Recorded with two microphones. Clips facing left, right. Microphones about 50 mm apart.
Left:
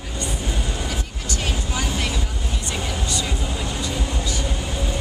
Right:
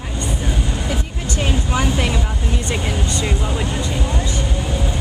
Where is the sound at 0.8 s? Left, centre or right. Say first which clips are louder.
Right 5 dB; right.